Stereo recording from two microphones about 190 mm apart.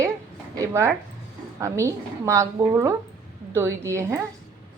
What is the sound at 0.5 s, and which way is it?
A woman's voice, 15° right (ahead or behind).